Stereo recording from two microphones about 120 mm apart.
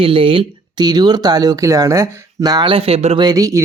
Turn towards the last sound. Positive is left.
turn(degrees=-25)  # may be behind; listen again after turning